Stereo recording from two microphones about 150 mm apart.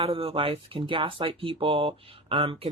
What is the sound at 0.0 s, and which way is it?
Speech, 35° right (ahead or behind).